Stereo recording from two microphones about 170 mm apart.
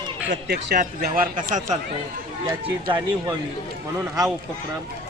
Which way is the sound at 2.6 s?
30° right (ahead or behind).